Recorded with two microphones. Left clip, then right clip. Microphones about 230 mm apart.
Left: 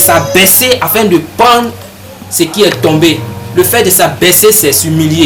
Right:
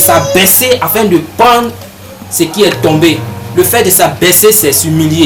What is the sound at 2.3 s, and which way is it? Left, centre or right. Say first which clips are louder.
Speech: even; centre.